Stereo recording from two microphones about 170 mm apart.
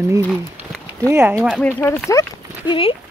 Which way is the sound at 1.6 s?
10° left (ahead or behind).